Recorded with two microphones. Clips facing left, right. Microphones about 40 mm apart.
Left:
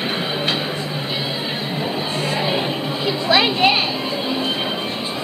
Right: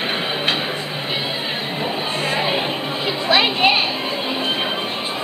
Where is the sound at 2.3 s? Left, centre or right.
Centre.